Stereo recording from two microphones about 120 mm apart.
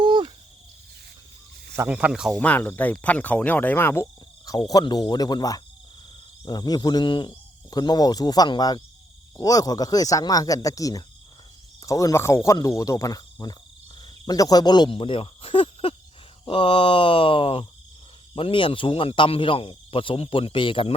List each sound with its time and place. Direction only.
0.0 s a sound: 40° right (ahead or behind)
1.9 s speech: 10° right (ahead or behind)
2.3 s speech: 10° left (ahead or behind); by 14.8 s 35° left (ahead or behind)
14.8 s speech: 45° left (ahead or behind)